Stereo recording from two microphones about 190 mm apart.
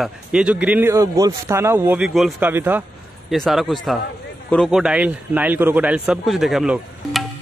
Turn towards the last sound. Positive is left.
turn(degrees=0)  # may be behind; listen again after turning